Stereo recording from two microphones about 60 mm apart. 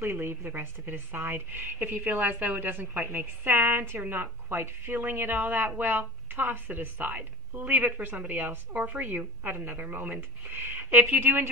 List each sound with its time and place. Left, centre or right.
0.0 s a woman's voice: right